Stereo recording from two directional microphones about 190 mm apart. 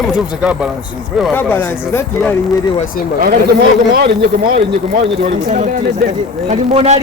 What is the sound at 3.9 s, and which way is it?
Speech, 55° right (ahead or behind).